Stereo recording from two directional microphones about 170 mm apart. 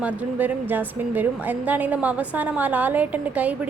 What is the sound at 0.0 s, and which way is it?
A woman's voice, 10° right (ahead or behind).